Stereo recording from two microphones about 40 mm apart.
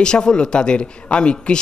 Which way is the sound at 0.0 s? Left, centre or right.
Left.